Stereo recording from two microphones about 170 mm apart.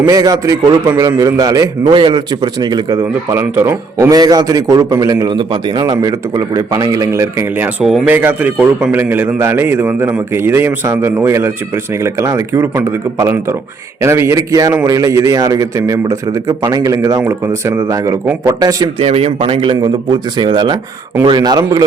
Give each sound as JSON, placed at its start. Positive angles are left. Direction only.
{"t": 0.1, "sound": "a man's voice", "side_deg": -20}
{"t": 18.9, "sound": "a man's voice", "side_deg": -35}